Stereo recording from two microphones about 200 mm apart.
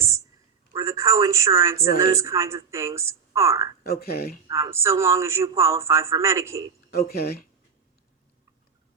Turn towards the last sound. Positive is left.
turn(degrees=50)  # may be behind; listen again after turning